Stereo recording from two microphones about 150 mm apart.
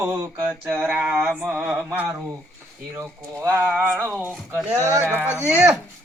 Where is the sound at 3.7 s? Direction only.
10° left (ahead or behind).